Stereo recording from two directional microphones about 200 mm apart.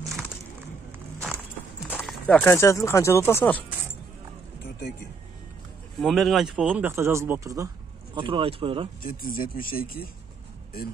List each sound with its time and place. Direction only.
1.9 s speech: 5° left (ahead or behind)
5.9 s speech: centre (ahead or behind); by 8.8 s 25° right (ahead or behind)
9.0 s speech: 45° left (ahead or behind)